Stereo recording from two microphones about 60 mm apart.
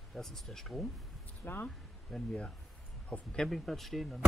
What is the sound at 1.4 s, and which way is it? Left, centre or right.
Speech, left.